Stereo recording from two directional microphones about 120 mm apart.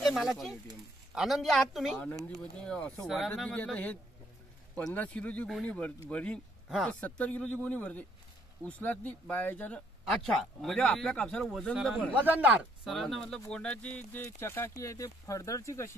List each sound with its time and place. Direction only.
0.0 s speech: centre (ahead or behind)
3.4 s speech: 10° left (ahead or behind)
7.0 s speech: 10° left (ahead or behind)
10.0 s speech: centre (ahead or behind)
11.8 s speech: 10° right (ahead or behind)
12.8 s speech: centre (ahead or behind); by 15.9 s 25° left (ahead or behind)